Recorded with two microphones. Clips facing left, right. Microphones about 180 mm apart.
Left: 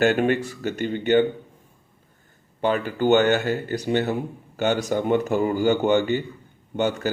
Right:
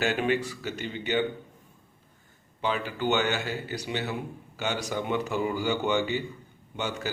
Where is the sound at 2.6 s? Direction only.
50° left (ahead or behind).